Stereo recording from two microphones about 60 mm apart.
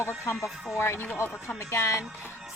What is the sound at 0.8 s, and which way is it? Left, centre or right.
Speech, left.